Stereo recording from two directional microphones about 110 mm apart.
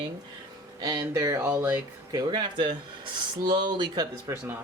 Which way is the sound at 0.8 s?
40° right (ahead or behind).